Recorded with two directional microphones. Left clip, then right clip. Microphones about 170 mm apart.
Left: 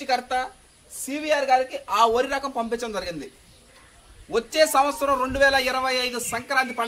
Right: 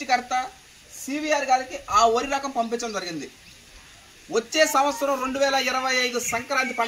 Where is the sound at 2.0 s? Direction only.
40° left (ahead or behind).